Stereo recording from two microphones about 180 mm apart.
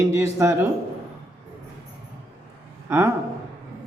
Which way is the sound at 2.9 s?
15° right (ahead or behind).